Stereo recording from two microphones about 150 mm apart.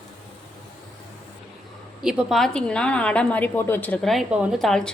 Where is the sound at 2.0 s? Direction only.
Centre (ahead or behind).